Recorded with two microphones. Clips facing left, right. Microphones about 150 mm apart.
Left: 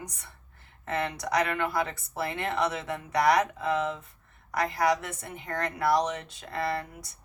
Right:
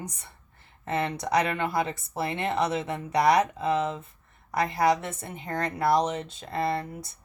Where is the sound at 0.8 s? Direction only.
25° right (ahead or behind).